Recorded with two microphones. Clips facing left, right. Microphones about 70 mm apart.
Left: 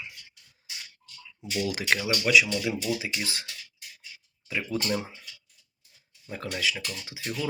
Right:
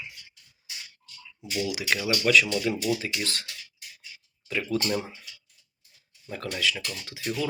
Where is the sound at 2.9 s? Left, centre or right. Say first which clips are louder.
Right 1 dB; centre.